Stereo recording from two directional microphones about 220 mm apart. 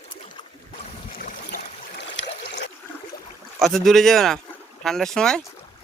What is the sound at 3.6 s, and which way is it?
Speech, centre (ahead or behind).